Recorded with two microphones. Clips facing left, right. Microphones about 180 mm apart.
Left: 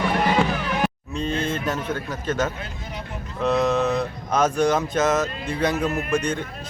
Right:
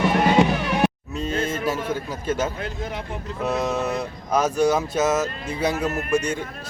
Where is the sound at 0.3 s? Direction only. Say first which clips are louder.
Right 5 dB; 20° right (ahead or behind).